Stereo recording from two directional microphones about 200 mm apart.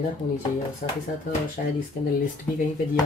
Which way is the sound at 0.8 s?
45° left (ahead or behind).